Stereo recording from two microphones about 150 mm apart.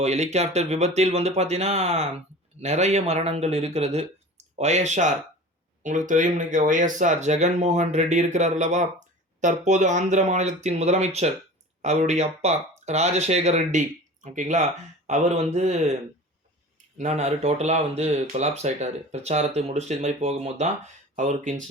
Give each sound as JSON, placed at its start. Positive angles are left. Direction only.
{"t": 0.0, "sound": "speech", "side_deg": -50}
{"t": 17.0, "sound": "speech", "side_deg": -50}